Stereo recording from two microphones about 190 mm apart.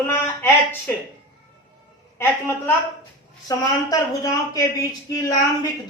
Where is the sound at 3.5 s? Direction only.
20° left (ahead or behind).